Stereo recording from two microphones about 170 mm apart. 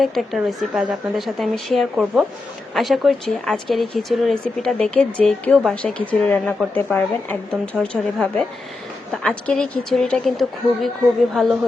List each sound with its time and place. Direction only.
0.0 s speech: centre (ahead or behind)